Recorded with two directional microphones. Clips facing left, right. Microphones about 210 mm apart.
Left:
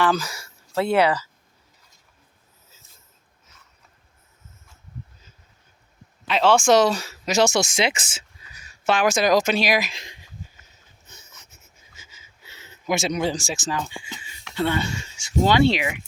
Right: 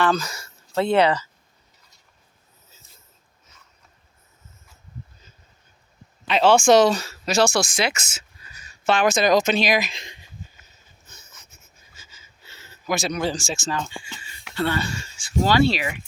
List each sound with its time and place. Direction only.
0.0 s speech: 10° left (ahead or behind)
6.2 s speech: centre (ahead or behind); by 8.4 s 25° left (ahead or behind)
8.5 s speech: 10° left (ahead or behind)
11.9 s a sound: 15° left (ahead or behind)
14.5 s speech: 15° left (ahead or behind)